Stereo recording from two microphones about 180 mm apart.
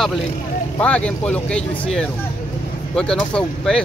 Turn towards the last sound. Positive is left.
turn(degrees=5)  # may be behind; listen again after turning